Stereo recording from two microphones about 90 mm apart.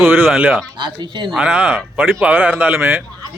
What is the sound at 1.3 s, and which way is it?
Speech, 15° right (ahead or behind).